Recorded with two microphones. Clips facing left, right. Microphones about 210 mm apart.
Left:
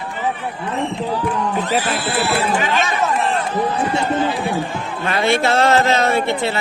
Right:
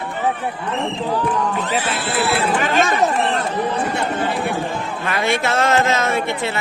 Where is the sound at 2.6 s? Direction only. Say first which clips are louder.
Right 2 dB; 50° right (ahead or behind).